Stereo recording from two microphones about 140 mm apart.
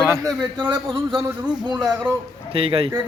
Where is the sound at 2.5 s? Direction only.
40° right (ahead or behind).